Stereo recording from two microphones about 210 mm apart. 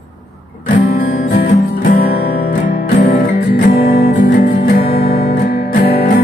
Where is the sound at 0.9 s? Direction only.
40° left (ahead or behind).